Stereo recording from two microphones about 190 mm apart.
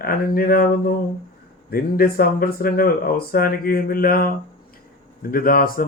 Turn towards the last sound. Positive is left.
turn(degrees=50)  # may be behind; listen again after turning